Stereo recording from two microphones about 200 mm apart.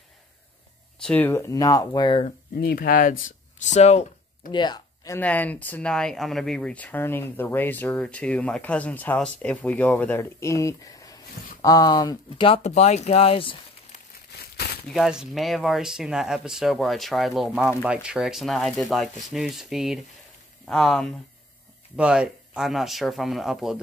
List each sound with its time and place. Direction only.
1.0 s speech: 10° left (ahead or behind)
2.2 s speech: 50° left (ahead or behind); by 4.1 s 35° left (ahead or behind)
4.5 s speech: 20° left (ahead or behind)
14.9 s speech: centre (ahead or behind)